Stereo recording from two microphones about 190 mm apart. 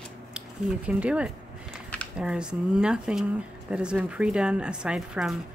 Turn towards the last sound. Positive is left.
turn(degrees=-5)  # may be behind; listen again after turning